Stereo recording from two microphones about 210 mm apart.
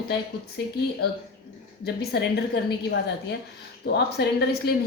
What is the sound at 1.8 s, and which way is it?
Speech, 50° left (ahead or behind).